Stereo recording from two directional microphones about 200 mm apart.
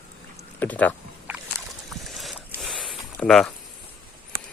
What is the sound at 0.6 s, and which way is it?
Speech, 10° left (ahead or behind).